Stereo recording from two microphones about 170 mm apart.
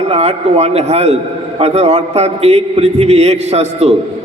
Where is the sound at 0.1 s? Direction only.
40° right (ahead or behind).